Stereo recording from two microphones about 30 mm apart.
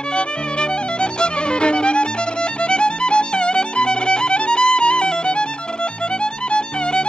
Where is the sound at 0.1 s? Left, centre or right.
Left.